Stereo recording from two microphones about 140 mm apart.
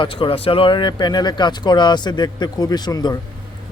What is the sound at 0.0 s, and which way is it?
Speech, 40° left (ahead or behind).